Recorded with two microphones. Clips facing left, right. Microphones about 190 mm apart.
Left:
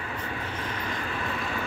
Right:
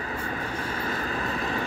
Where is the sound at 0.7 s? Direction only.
40° right (ahead or behind).